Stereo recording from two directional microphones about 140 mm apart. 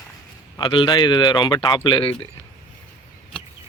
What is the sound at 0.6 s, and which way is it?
Speech, 35° left (ahead or behind).